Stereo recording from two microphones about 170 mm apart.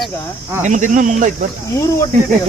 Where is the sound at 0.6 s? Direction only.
45° right (ahead or behind).